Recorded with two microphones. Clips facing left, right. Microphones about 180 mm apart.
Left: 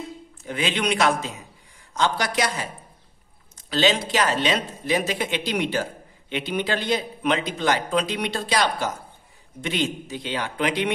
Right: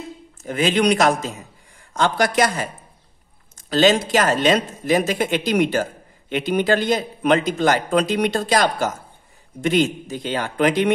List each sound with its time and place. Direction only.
0.5 s a man's voice: 45° right (ahead or behind)